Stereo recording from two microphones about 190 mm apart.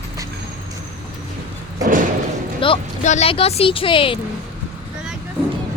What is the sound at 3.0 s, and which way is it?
Speech, 35° left (ahead or behind).